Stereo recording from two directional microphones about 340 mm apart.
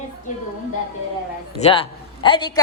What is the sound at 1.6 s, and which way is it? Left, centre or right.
A man's voice, centre.